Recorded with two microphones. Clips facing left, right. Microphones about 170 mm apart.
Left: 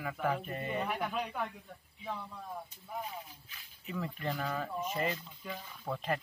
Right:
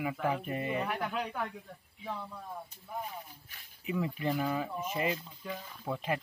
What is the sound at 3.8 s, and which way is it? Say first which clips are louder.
Speech: right 5 dB; 10° right (ahead or behind).